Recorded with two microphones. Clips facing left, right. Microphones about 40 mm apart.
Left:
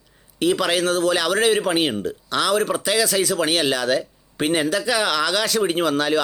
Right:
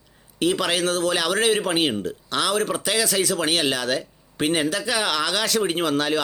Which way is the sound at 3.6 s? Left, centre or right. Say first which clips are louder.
Left 2 dB; right.